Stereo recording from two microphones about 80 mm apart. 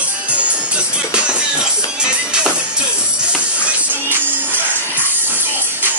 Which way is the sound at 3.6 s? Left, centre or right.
Right.